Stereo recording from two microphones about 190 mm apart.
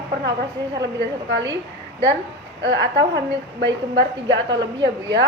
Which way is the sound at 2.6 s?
65° right (ahead or behind).